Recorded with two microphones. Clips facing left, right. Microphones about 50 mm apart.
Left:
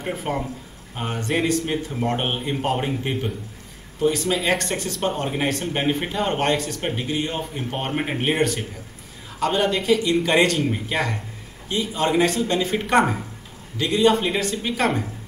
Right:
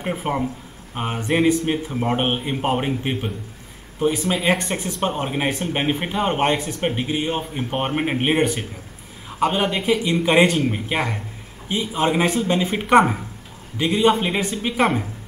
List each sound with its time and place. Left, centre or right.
0.0 s a man's voice: centre